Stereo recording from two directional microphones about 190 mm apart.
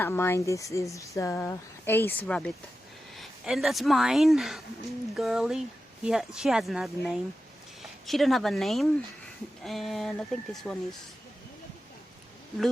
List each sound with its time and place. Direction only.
0.0 s a woman's voice: 10° left (ahead or behind)